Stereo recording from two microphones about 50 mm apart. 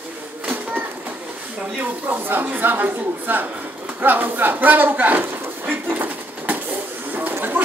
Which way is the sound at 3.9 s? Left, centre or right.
Right.